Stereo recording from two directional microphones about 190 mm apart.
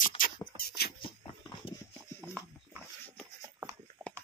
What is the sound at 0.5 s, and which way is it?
Beatboxing, 55° left (ahead or behind).